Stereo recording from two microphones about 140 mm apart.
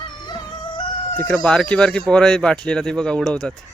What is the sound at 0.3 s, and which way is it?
Music, 30° left (ahead or behind).